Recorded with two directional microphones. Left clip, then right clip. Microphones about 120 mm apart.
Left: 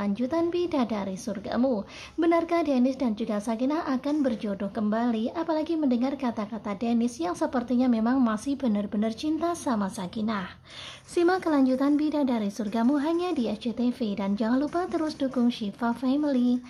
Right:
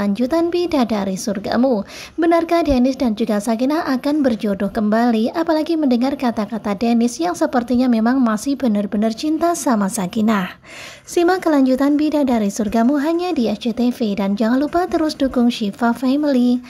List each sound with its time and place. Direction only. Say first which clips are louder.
0.0 s a woman's voice: right 9 dB; 40° right (ahead or behind)
2.1 s a woman's voice: right 9 dB; 30° right (ahead or behind); by 10.4 s 55° right (ahead or behind)
11.1 s a woman's voice: right 8 dB; 35° right (ahead or behind)